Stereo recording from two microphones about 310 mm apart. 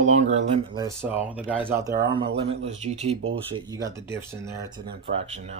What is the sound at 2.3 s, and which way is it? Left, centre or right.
Speech, right.